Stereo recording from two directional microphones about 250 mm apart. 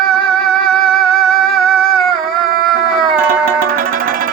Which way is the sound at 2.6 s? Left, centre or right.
Centre.